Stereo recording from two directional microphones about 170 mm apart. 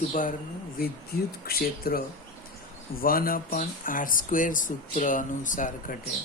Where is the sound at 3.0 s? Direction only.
60° left (ahead or behind).